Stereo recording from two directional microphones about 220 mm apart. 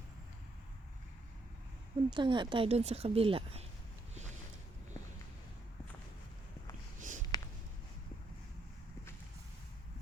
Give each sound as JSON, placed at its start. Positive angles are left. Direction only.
{"t": 2.0, "sound": "speech", "side_deg": -20}
{"t": 7.3, "sound": "writing", "side_deg": 15}